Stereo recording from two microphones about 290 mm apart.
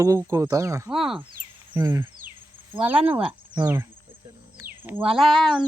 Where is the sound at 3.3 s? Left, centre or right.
Centre.